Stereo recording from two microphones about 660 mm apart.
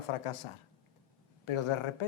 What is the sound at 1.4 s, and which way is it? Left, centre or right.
Speech, left.